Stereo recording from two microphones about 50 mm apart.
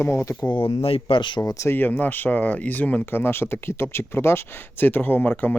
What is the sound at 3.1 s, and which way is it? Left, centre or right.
Speech, left.